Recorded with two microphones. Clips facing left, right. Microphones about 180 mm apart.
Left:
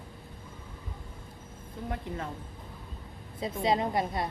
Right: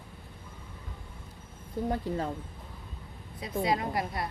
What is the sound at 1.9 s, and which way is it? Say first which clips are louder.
Speech: right 5 dB; 35° right (ahead or behind).